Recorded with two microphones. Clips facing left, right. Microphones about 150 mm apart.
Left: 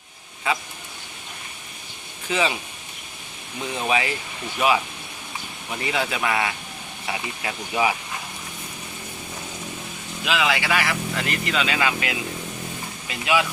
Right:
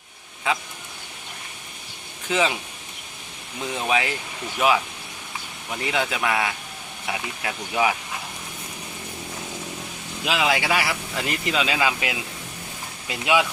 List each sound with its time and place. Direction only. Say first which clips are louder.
2.2 s speech: right 1 dB; centre (ahead or behind)
3.8 s speech: even; centre (ahead or behind)
10.2 s speech: even; 30° right (ahead or behind)
10.5 s speech: even; 15° right (ahead or behind)